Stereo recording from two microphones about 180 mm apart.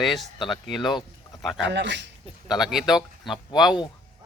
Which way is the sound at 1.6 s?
80° right.